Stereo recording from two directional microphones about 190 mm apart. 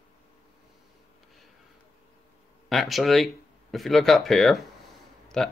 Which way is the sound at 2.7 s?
Centre (ahead or behind).